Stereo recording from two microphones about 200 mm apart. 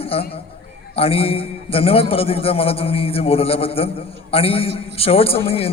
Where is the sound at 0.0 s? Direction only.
30° left (ahead or behind).